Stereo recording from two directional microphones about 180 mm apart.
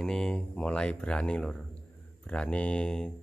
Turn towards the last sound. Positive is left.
turn(degrees=5)  # may be behind; listen again after turning